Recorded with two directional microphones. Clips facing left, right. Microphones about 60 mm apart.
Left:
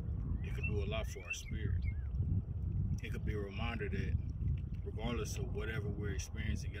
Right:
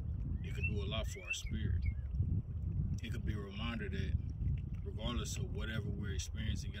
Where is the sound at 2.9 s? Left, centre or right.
Left.